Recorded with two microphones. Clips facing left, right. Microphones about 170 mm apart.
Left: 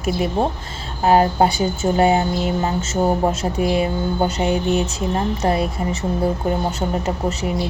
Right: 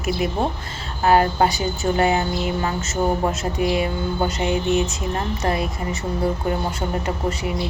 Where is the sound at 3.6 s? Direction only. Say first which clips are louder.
Left 2 dB; 40° left (ahead or behind).